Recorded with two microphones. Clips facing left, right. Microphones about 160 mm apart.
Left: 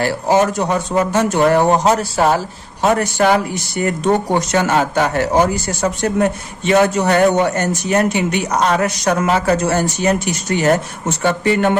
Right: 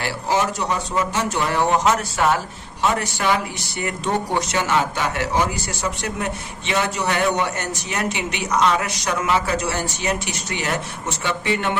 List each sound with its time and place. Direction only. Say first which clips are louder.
0.0 s speech: left 7 dB; 50° left (ahead or behind)
1.7 s speech: left 5 dB; 35° left (ahead or behind)
2.8 s speech: left 7 dB; 50° left (ahead or behind)